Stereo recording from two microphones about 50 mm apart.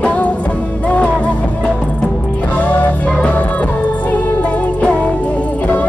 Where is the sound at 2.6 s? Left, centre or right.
Left.